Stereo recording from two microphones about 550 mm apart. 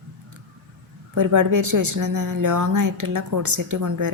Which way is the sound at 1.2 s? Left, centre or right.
Right.